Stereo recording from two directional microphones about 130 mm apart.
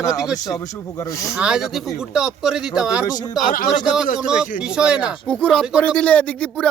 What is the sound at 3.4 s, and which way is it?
Speech, 90° left.